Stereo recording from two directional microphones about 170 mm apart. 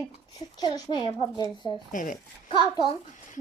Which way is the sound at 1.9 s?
50° left (ahead or behind).